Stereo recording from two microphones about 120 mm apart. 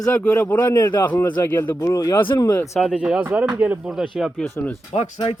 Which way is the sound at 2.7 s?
5° right (ahead or behind).